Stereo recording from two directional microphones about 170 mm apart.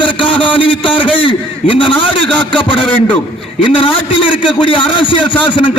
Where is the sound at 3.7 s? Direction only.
30° left (ahead or behind).